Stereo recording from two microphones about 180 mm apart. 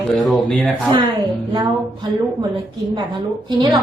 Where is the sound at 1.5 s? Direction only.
20° right (ahead or behind).